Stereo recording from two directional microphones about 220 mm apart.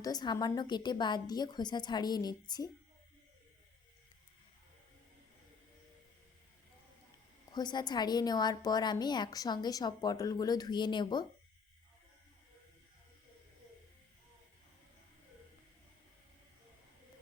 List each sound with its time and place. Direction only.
0.0 s a woman's voice: 20° left (ahead or behind)
7.5 s a woman's voice: 20° left (ahead or behind)